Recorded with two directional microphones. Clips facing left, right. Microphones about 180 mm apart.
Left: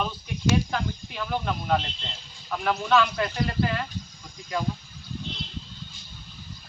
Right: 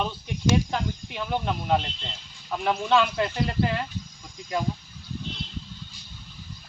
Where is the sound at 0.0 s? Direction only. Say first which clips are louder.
Right 1 dB; 20° right (ahead or behind).